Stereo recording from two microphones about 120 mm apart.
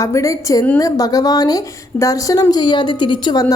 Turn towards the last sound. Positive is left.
turn(degrees=40)  # may be behind; listen again after turning